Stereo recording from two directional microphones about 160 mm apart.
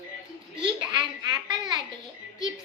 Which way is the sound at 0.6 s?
25° right (ahead or behind).